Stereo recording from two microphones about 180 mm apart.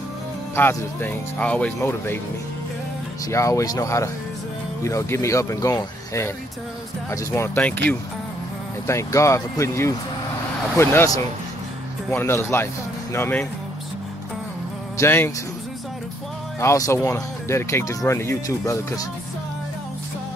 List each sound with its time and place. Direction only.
0.6 s speech: 10° left (ahead or behind)
3.3 s speech: 15° left (ahead or behind)
8.8 s speech: 15° left (ahead or behind)
12.1 s speech: 15° left (ahead or behind)
15.0 s speech: 15° left (ahead or behind)
16.5 s speech: 15° left (ahead or behind)